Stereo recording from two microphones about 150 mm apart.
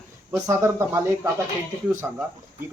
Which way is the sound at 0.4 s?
20° right (ahead or behind).